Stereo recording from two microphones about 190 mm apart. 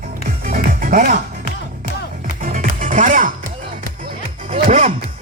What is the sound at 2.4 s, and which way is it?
Music, 45° right (ahead or behind).